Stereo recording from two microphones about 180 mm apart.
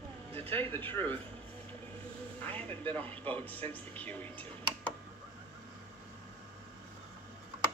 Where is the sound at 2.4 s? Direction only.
10° left (ahead or behind).